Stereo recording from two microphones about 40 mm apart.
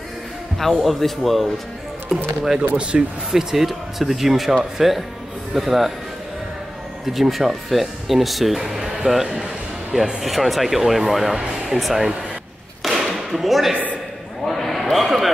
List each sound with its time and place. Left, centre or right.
0.8 s speech: centre
2.0 s speech: centre
2.9 s speech: right
3.3 s speech: centre
7.1 s speech: centre
12.8 s a sound: centre